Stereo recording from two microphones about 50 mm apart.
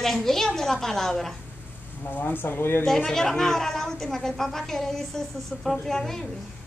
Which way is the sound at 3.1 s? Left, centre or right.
Centre.